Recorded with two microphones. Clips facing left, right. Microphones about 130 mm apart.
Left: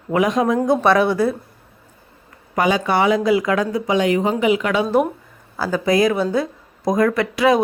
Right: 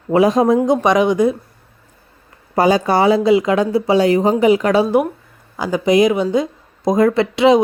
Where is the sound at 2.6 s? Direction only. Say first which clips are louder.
Right 4 dB; 35° right (ahead or behind).